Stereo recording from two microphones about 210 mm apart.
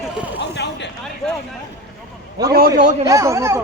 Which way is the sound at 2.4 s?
15° right (ahead or behind).